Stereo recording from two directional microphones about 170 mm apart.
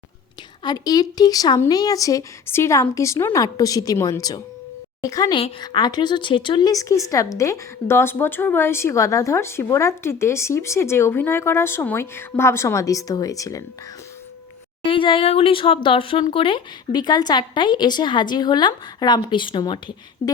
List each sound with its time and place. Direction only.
0.6 s speech: 25° left (ahead or behind)
14.8 s speech: 30° left (ahead or behind)
20.2 s a sound: 15° left (ahead or behind)